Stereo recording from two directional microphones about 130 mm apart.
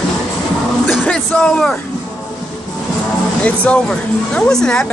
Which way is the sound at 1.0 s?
10° left (ahead or behind).